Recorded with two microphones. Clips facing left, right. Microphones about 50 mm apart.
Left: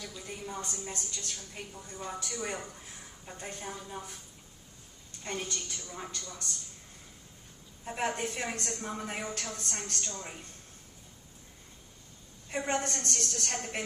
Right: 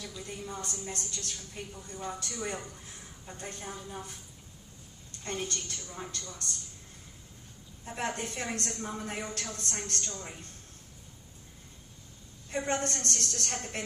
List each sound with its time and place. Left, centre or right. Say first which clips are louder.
0.0 s a woman's voice: right 1 dB; centre
5.2 s a woman's voice: right 1 dB; centre
7.9 s a woman's voice: left 2 dB; centre
12.5 s a woman's voice: even; centre